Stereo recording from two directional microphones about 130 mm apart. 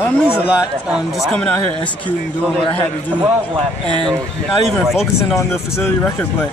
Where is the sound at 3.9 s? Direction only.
40° right (ahead or behind).